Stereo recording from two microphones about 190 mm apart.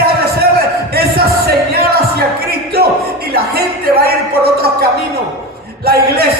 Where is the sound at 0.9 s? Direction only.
55° right (ahead or behind).